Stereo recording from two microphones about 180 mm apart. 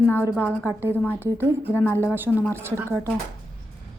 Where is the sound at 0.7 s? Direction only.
15° right (ahead or behind).